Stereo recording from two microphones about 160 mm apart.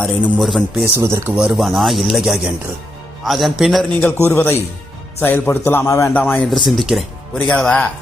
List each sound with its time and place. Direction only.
0.2 s speech: centre (ahead or behind)
0.9 s speech: 15° right (ahead or behind)
1.4 s speech: 5° right (ahead or behind)
4.3 s a man's voice: 15° left (ahead or behind)
6.5 s a man's voice: centre (ahead or behind)